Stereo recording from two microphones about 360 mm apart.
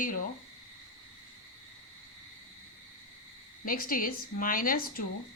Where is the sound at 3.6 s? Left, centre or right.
Left.